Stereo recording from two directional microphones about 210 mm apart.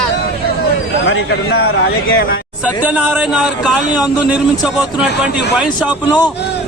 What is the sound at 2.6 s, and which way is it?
A man's voice, 5° right (ahead or behind).